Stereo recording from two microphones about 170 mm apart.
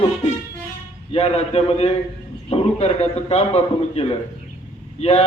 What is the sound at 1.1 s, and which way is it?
A man's voice, 35° left (ahead or behind).